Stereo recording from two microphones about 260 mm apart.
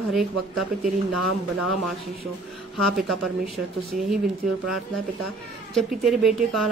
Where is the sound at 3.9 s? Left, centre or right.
Right.